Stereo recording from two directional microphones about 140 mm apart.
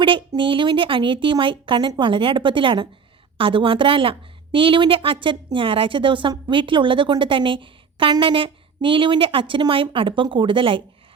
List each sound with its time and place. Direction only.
0.0 s a woman's voice: 35° right (ahead or behind)